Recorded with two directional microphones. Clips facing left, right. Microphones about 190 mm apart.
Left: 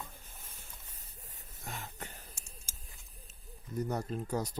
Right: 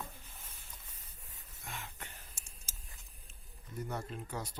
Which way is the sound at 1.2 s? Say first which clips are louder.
Left 5 dB; 40° left (ahead or behind).